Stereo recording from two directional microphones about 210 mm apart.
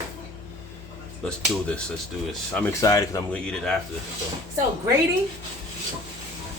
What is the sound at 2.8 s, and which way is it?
Speech, 15° left (ahead or behind).